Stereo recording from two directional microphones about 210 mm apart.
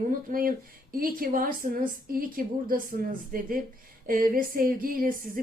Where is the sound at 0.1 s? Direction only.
40° right (ahead or behind).